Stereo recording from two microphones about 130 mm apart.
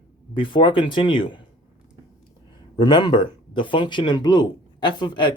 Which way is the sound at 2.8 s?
35° left (ahead or behind).